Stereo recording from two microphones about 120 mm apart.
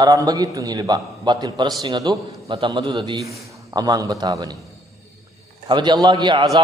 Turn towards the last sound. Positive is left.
turn(degrees=-35)  # may be behind; listen again after turning